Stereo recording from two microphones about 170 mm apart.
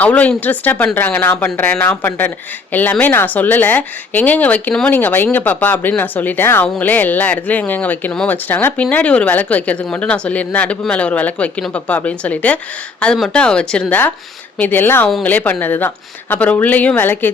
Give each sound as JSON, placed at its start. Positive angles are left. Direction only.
{"t": 0.0, "sound": "speech", "side_deg": 10}